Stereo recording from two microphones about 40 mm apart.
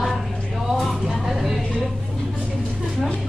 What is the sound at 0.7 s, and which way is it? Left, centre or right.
Vehicle, centre.